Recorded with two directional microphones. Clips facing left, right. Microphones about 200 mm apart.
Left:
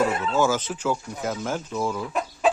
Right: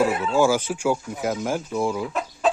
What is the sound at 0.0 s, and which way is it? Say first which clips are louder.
Speech: right 3 dB; 10° right (ahead or behind).